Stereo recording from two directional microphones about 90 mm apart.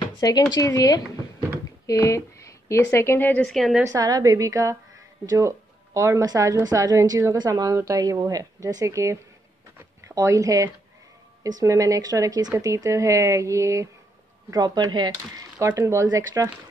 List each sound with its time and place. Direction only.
0.2 s speech: 50° left (ahead or behind)
1.9 s speech: 35° left (ahead or behind)
3.4 s a woman's voice: centre (ahead or behind)
3.8 s speech: 45° right (ahead or behind)
7.3 s speech: 45° right (ahead or behind)
9.8 s a sound: 35° right (ahead or behind)
11.4 s speech: 40° right (ahead or behind)
14.5 s speech: 50° right (ahead or behind)
15.6 s speech: 35° right (ahead or behind)